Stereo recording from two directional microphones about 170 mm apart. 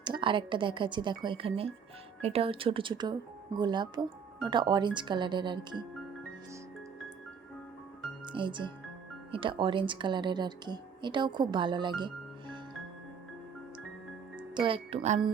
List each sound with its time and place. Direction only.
0.0 s speech: 30° right (ahead or behind)
8.2 s speech: 30° right (ahead or behind)
14.3 s speech: 30° right (ahead or behind)